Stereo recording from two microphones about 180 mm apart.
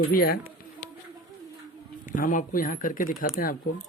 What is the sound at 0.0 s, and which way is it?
Speech, 55° left (ahead or behind).